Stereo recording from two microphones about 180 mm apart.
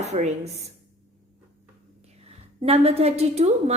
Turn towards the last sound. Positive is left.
turn(degrees=-35)  # may be behind; listen again after turning